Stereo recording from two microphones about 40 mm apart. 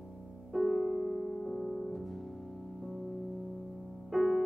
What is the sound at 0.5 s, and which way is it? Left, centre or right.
Music, centre.